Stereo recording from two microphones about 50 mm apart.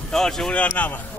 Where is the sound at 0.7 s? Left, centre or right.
Left.